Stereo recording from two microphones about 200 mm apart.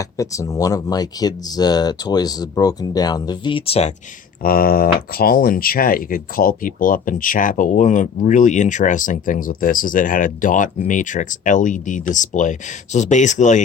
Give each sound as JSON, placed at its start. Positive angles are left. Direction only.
{"t": 0.0, "sound": "speech", "side_deg": 15}
{"t": 4.4, "sound": "speech", "side_deg": 45}